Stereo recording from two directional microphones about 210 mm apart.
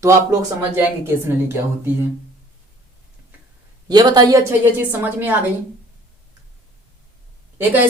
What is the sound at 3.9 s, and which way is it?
A woman's voice, 20° right (ahead or behind).